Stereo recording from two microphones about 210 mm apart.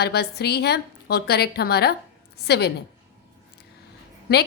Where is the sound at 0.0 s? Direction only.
50° left (ahead or behind).